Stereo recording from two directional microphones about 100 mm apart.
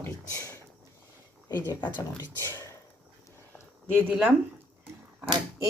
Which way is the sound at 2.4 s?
25° left (ahead or behind).